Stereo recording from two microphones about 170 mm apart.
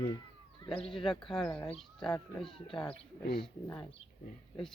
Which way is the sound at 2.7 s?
5° left (ahead or behind).